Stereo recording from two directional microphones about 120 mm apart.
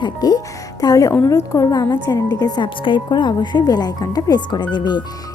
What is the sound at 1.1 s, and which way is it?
A woman's voice, 20° left (ahead or behind).